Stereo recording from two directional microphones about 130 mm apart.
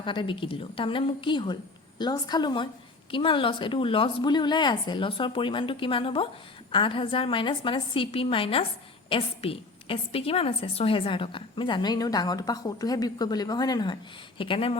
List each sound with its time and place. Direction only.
0.0 s a woman's voice: 40° left (ahead or behind)